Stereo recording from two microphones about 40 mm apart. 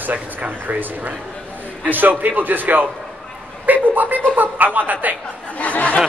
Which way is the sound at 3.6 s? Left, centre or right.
Right.